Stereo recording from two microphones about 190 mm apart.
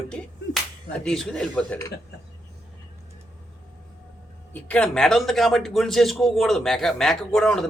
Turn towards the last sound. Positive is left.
turn(degrees=5)  # may be behind; listen again after turning